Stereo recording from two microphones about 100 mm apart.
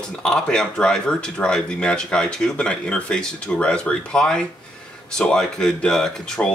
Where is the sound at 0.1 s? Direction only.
5° left (ahead or behind).